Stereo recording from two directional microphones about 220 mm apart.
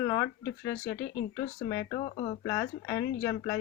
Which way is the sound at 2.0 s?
25° left (ahead or behind).